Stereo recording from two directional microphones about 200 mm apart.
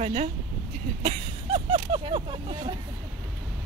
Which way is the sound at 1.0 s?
25° right (ahead or behind).